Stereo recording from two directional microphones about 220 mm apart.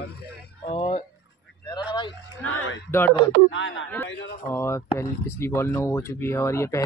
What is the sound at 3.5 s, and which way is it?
Speech, 60° left (ahead or behind).